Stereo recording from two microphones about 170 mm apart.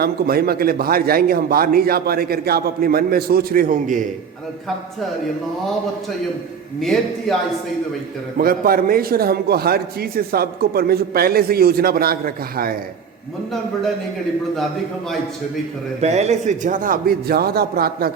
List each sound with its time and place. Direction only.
0.0 s a man's voice: 65° right (ahead or behind)
7.3 s a man's voice: 5° left (ahead or behind)
8.4 s a man's voice: 60° right (ahead or behind)
16.0 s a man's voice: 40° right (ahead or behind); by 18.1 s 65° right (ahead or behind)